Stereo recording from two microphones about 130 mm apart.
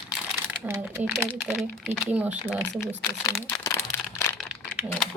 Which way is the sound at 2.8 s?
20° left (ahead or behind).